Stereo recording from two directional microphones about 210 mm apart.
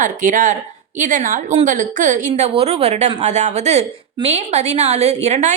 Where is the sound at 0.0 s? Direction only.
35° right (ahead or behind).